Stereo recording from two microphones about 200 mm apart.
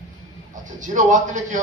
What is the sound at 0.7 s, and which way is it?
Speech, 40° right (ahead or behind).